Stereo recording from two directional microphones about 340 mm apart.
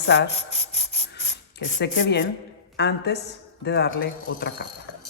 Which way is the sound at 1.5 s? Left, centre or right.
Left.